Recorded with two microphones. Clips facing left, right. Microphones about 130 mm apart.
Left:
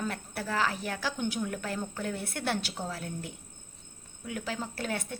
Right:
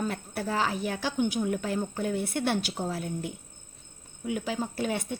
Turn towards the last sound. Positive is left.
turn(degrees=-15)  # may be behind; listen again after turning